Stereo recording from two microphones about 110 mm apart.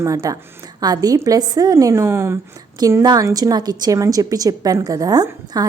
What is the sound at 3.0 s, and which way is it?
A woman's voice, 35° right (ahead or behind).